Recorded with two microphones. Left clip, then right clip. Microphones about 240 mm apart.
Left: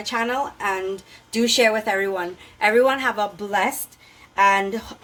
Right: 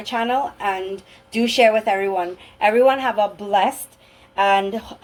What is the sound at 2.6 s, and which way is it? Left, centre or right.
Speech, left.